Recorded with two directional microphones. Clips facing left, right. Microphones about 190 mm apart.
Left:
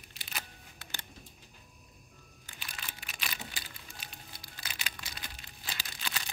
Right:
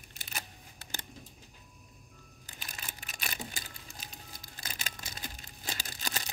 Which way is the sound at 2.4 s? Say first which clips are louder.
Even; 40° right (ahead or behind).